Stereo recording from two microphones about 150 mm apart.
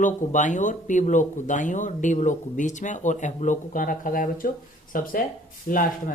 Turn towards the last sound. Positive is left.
turn(degrees=65)  # may be behind; listen again after turning